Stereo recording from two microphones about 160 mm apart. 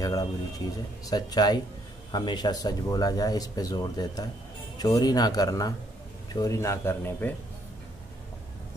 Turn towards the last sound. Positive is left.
turn(degrees=15)  # may be behind; listen again after turning